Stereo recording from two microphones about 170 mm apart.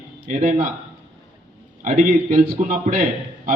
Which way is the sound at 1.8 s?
45° right (ahead or behind).